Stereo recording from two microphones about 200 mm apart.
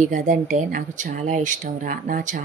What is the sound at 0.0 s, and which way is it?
Speech, 40° right (ahead or behind).